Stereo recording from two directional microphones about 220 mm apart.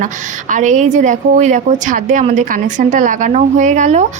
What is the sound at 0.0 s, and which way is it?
A woman's voice, 35° right (ahead or behind).